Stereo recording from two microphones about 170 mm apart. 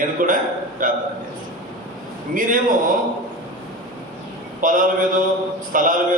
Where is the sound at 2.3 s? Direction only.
50° right (ahead or behind).